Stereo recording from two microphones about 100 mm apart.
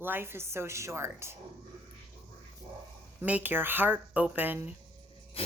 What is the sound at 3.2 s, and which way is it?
Speech, 15° right (ahead or behind).